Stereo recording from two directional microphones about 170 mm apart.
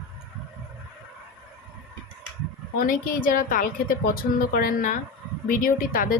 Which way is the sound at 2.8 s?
55° left (ahead or behind).